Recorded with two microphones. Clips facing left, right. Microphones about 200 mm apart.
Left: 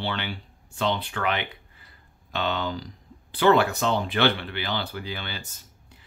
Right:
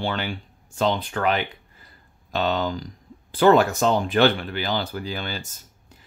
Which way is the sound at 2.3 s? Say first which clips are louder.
Right 4 dB; 40° right (ahead or behind).